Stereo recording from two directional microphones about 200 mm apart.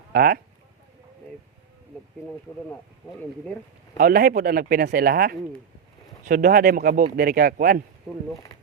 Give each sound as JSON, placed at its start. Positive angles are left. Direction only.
{"t": 0.1, "sound": "speech", "side_deg": -50}
{"t": 3.9, "sound": "speech", "side_deg": -45}